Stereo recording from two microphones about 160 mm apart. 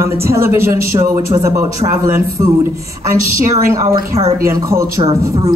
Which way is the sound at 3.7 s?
20° right (ahead or behind).